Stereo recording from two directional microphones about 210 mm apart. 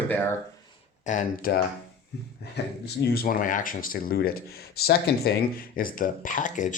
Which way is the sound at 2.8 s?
50° left (ahead or behind).